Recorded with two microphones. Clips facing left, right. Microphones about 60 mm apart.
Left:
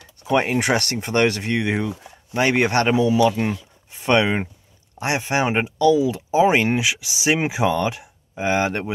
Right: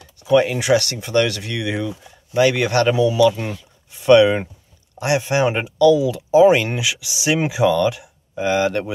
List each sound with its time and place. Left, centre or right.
0.2 s speech: left